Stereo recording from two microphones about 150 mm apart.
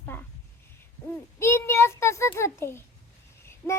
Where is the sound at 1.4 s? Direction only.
15° left (ahead or behind).